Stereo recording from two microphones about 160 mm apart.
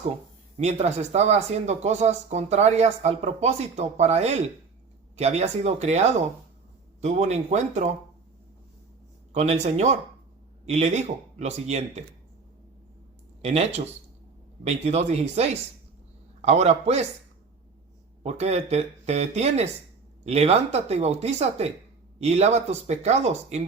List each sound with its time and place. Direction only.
0.5 s speech: 45° right (ahead or behind)
9.3 s speech: 45° right (ahead or behind)
13.4 s speech: 40° right (ahead or behind)
18.2 s speech: 40° right (ahead or behind)